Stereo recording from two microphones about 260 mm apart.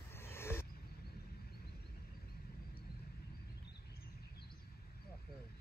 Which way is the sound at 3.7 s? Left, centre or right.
Left.